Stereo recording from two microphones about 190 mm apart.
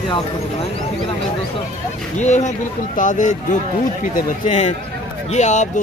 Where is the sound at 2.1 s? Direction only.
40° left (ahead or behind).